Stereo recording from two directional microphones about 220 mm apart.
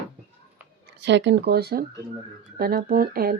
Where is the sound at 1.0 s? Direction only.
55° right (ahead or behind).